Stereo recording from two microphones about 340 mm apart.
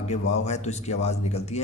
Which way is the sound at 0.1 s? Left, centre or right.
Centre.